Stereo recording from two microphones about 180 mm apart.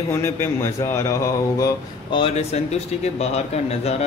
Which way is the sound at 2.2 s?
35° left (ahead or behind).